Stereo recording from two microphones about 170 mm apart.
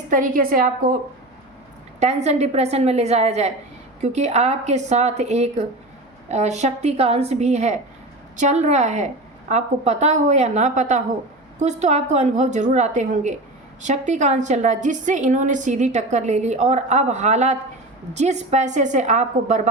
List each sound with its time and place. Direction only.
0.1 s a woman's voice: 55° right (ahead or behind)
2.0 s a woman's voice: 40° right (ahead or behind)